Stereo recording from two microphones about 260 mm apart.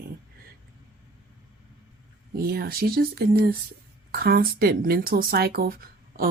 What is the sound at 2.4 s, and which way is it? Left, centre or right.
Speech, right.